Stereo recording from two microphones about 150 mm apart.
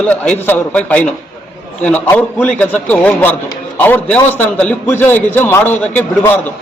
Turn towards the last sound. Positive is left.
turn(degrees=10)  # may be behind; listen again after turning